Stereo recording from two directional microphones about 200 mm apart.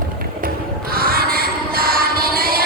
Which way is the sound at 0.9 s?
50° right (ahead or behind).